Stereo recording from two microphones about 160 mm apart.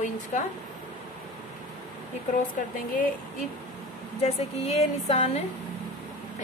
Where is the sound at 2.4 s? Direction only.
60° left (ahead or behind).